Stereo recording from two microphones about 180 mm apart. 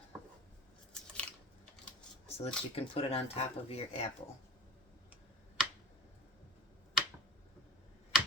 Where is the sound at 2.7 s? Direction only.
30° left (ahead or behind).